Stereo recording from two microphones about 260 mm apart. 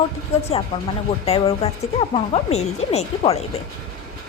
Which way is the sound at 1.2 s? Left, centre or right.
Left.